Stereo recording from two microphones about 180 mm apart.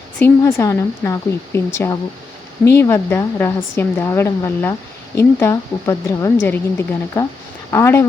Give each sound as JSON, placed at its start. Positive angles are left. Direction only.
{"t": 0.2, "sound": "a woman's voice", "side_deg": 10}